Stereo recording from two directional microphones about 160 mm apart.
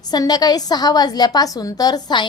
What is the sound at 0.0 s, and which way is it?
A woman's voice, 25° left (ahead or behind).